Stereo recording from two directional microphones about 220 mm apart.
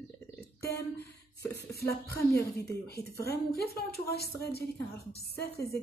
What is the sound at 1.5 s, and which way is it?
Speech, 45° left (ahead or behind).